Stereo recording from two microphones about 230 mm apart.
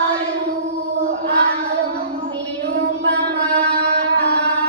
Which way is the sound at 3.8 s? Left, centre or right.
Right.